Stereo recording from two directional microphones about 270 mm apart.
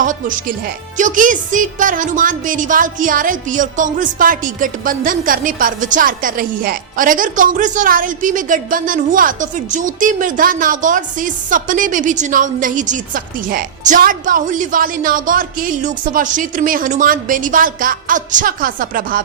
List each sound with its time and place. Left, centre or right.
0.0 s speech: right